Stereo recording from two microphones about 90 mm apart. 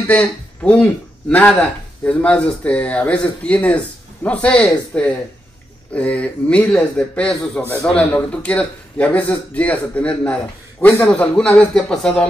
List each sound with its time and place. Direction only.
0.0 s speech: 15° left (ahead or behind)